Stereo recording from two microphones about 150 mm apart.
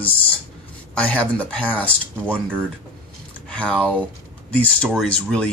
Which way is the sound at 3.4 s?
5° left (ahead or behind).